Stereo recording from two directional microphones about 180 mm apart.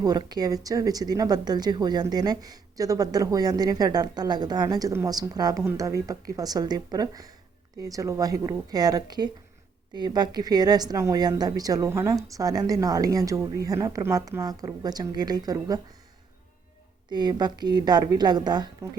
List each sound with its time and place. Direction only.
0.0 s speech: 20° right (ahead or behind)
17.1 s speech: 25° right (ahead or behind)